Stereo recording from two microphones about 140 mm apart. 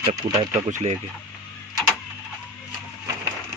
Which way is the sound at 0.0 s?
30° right (ahead or behind).